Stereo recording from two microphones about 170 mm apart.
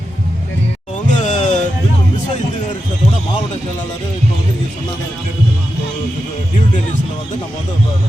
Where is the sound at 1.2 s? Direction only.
45° left (ahead or behind).